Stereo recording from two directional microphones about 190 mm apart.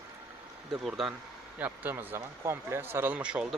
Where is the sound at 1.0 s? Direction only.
Centre (ahead or behind).